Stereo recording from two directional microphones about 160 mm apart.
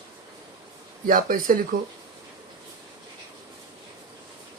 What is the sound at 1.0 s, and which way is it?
Speech, 60° right (ahead or behind).